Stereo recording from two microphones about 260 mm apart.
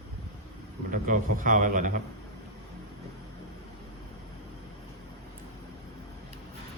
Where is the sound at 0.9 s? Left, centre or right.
Right.